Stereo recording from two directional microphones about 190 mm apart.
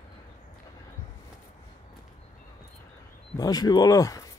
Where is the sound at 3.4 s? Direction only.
20° left (ahead or behind).